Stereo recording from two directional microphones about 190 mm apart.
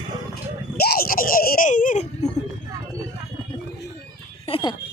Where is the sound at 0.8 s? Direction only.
55° left (ahead or behind).